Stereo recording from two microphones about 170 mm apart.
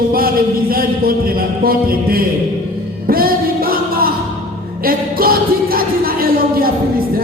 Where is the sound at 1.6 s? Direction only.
60° right (ahead or behind).